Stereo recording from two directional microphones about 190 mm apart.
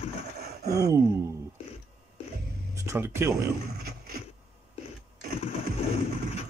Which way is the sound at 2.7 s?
15° right (ahead or behind).